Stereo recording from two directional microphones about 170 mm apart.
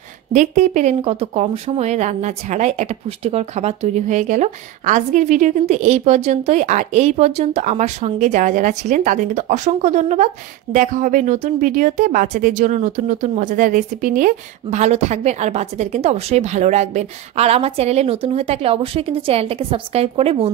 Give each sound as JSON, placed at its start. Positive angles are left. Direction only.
{"t": 0.3, "sound": "speech", "side_deg": -45}